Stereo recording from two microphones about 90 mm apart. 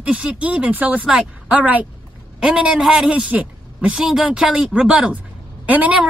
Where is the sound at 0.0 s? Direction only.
15° right (ahead or behind).